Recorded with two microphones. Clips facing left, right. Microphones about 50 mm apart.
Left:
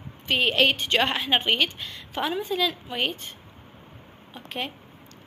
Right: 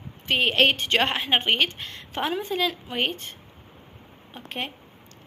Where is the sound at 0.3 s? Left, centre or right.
Right.